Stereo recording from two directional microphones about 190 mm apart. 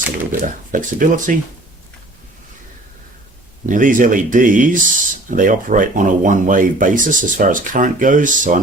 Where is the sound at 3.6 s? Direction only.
45° right (ahead or behind).